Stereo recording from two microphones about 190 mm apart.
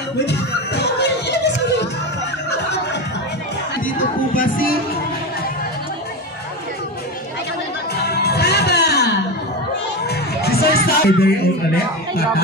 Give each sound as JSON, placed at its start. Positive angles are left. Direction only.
{"t": 0.2, "sound": "music", "side_deg": 60}
{"t": 3.8, "sound": "music", "side_deg": 45}
{"t": 8.0, "sound": "music", "side_deg": 55}